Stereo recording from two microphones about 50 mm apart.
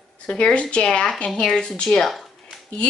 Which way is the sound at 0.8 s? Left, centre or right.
Centre.